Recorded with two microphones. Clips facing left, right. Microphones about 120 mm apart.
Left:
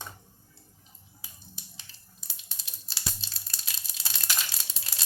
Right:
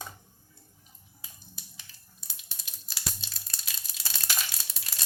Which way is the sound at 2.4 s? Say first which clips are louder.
Left 1 dB; 30° left (ahead or behind).